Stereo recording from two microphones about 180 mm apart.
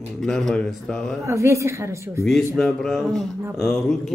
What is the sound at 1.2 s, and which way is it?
A woman's voice, 15° right (ahead or behind).